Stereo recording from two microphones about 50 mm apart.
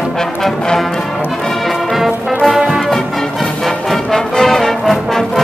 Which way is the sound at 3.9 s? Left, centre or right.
Centre.